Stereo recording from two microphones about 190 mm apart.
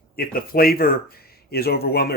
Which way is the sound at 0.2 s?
55° left (ahead or behind).